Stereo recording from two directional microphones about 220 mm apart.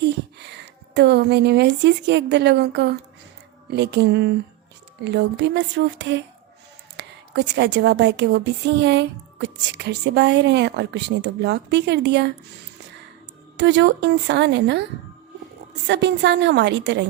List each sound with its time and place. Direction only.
0.0 s speech: 50° right (ahead or behind)
13.6 s speech: 50° right (ahead or behind)
15.9 s speech: 55° right (ahead or behind)